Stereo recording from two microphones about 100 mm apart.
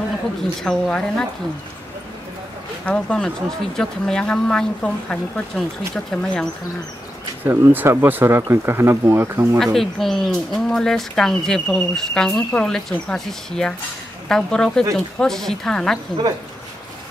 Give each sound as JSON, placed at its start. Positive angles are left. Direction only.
{"t": 0.4, "sound": "speech", "side_deg": 5}
{"t": 2.8, "sound": "speech", "side_deg": 10}
{"t": 7.4, "sound": "speech", "side_deg": -20}
{"t": 9.8, "sound": "speech", "side_deg": 5}